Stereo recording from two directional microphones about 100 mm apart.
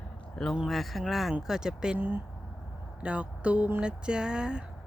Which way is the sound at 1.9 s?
20° right (ahead or behind).